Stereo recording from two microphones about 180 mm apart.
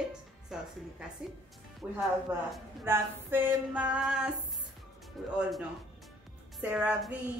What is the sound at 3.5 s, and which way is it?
Speech, 5° right (ahead or behind).